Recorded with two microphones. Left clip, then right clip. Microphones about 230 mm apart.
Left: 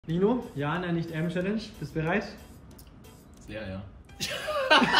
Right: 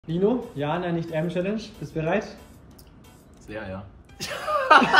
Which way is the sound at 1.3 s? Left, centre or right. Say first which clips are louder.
Right 4 dB; centre.